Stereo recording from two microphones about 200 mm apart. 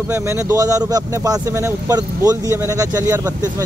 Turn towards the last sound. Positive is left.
turn(degrees=-15)  # may be behind; listen again after turning